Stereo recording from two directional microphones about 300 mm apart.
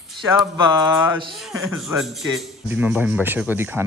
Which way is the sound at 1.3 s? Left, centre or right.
Centre.